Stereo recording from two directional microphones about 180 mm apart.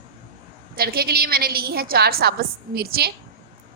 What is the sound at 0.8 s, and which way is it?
A woman's voice, 60° right (ahead or behind).